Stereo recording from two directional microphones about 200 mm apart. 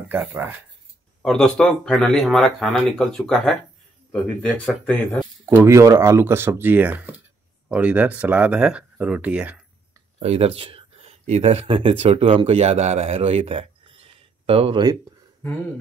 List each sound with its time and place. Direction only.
0.1 s speech: 10° right (ahead or behind)
1.2 s speech: 5° left (ahead or behind)
5.4 s speech: 15° right (ahead or behind)
10.1 s speech: 30° right (ahead or behind)